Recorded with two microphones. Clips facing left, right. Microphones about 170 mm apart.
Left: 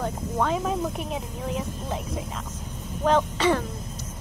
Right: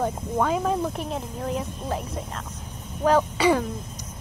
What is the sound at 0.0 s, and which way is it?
Speech, 5° right (ahead or behind).